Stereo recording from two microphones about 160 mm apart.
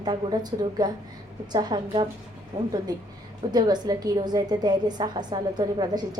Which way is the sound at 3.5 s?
25° right (ahead or behind).